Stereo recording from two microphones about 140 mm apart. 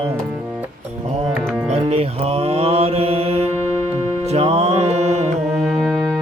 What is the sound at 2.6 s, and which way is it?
Mantra, 45° right (ahead or behind).